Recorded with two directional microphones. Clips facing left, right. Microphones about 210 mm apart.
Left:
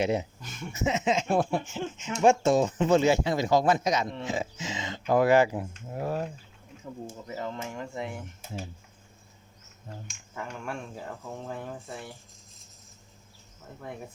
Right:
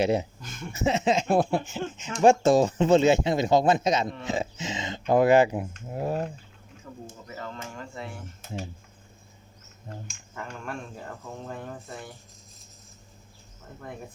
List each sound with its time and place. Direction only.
0.0 s speech: 35° right (ahead or behind)
0.4 s speech: 5° left (ahead or behind)
0.7 s speech: 35° right (ahead or behind)
7.1 s speech: 20° left (ahead or behind)
10.1 s speech: 5° left (ahead or behind)